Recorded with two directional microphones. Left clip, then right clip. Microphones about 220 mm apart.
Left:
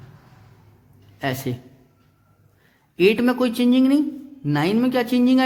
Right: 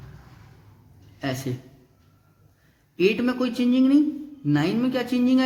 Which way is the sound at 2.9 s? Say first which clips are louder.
Left 4 dB; 35° left (ahead or behind).